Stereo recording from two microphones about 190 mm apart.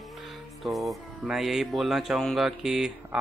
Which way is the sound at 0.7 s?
Centre (ahead or behind).